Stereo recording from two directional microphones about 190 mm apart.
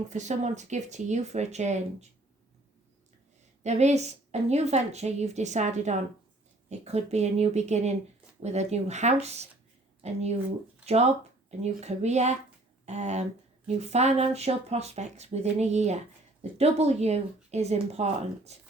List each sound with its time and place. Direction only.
0.1 s a woman's voice: 40° right (ahead or behind)
3.6 s a woman's voice: 35° right (ahead or behind)